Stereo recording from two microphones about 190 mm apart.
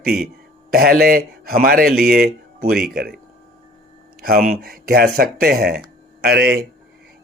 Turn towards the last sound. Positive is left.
turn(degrees=-55)  # may be behind; listen again after turning